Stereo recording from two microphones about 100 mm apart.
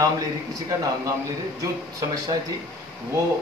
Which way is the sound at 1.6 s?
35° right (ahead or behind).